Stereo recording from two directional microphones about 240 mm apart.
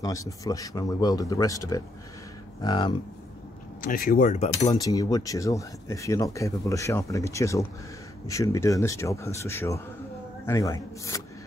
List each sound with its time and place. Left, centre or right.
0.0 s speech: centre
3.8 s speech: left
4.7 s speech: centre